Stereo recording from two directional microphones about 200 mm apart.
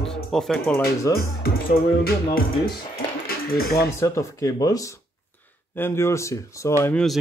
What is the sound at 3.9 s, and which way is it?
Speech, 15° left (ahead or behind).